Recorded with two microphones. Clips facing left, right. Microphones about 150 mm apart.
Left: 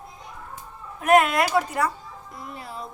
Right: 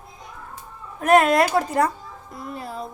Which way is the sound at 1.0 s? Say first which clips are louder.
Right 2 dB; 40° right (ahead or behind).